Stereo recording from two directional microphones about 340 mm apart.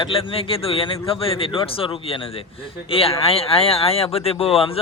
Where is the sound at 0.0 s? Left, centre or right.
Centre.